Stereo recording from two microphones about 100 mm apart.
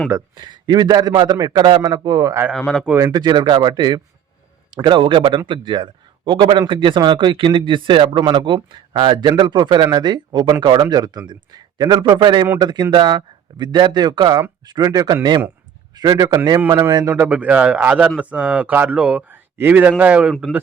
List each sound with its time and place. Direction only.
0.3 s speech: 50° right (ahead or behind)
2.5 s speech: centre (ahead or behind)
3.1 s a man's voice: 45° right (ahead or behind)
17.2 s speech: 15° right (ahead or behind)